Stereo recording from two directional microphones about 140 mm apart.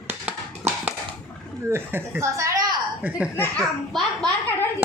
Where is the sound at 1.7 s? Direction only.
15° right (ahead or behind).